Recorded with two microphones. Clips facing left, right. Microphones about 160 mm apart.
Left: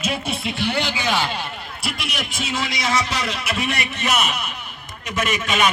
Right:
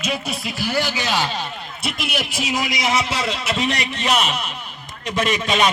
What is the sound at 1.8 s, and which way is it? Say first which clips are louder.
A man's voice: right 3 dB; centre (ahead or behind).